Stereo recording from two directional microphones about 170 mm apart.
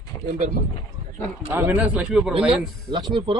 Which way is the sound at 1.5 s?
15° right (ahead or behind).